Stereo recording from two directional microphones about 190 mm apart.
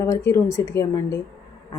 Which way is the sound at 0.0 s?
15° left (ahead or behind).